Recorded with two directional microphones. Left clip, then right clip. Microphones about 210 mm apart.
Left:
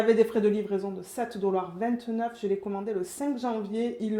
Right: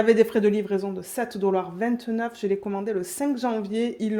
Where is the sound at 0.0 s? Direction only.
35° right (ahead or behind).